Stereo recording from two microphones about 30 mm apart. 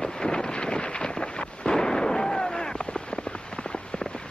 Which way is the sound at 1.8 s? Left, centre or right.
Left.